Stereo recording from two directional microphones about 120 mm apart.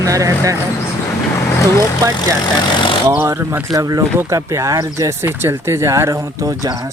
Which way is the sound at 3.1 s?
20° right (ahead or behind).